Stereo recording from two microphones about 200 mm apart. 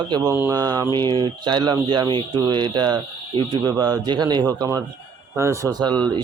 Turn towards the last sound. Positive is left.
turn(degrees=-20)  # may be behind; listen again after turning